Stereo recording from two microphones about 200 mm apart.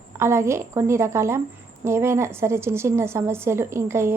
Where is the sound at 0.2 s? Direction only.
15° right (ahead or behind).